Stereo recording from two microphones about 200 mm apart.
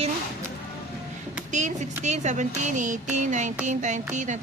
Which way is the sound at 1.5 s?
35° right (ahead or behind).